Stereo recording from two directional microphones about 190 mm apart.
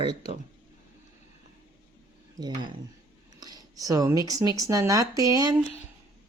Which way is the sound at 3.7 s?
20° right (ahead or behind).